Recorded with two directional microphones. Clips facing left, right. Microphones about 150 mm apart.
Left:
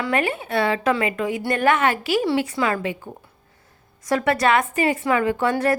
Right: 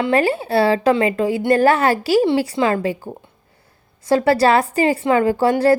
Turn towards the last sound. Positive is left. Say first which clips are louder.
# right 5 dB
turn(degrees=-35)  # may be behind; listen again after turning